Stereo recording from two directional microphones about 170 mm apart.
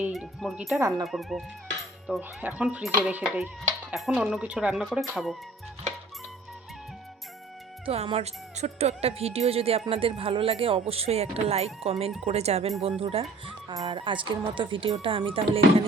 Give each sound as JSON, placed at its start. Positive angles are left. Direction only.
{"t": 0.0, "sound": "speech", "side_deg": -5}
{"t": 0.8, "sound": "speech", "side_deg": -20}
{"t": 1.0, "sound": "speech", "side_deg": 0}
{"t": 7.9, "sound": "speech", "side_deg": -35}
{"t": 13.4, "sound": "speech", "side_deg": -25}